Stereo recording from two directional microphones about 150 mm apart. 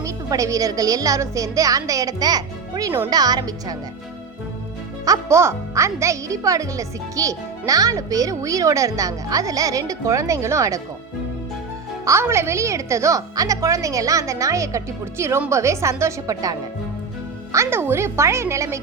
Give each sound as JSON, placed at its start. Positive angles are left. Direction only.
{"t": 0.0, "sound": "speech", "side_deg": -20}
{"t": 5.0, "sound": "speech", "side_deg": -20}
{"t": 12.0, "sound": "speech", "side_deg": -20}